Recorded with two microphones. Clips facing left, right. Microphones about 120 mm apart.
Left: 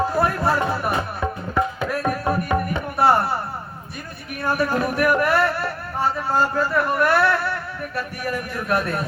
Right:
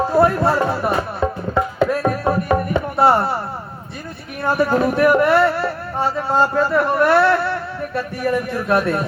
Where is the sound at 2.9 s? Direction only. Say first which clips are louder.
Right 2 dB; 25° right (ahead or behind).